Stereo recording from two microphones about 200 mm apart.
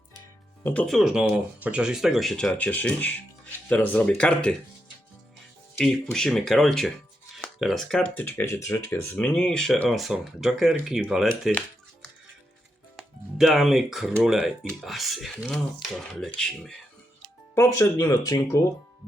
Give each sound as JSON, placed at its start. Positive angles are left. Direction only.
{"t": 0.6, "sound": "speech", "side_deg": 5}
{"t": 5.7, "sound": "speech", "side_deg": 0}
{"t": 13.4, "sound": "speech", "side_deg": 0}
{"t": 17.5, "sound": "speech", "side_deg": 15}